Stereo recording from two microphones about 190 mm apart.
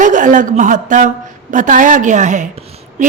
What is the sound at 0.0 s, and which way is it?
A woman's voice, 40° right (ahead or behind).